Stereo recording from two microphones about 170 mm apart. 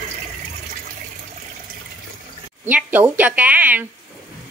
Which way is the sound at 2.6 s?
10° right (ahead or behind).